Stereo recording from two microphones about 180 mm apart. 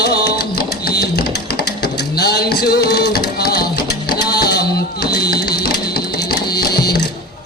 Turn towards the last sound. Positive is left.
turn(degrees=60)  # may be behind; listen again after turning